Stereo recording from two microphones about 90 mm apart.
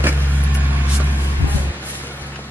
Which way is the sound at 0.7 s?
20° right (ahead or behind).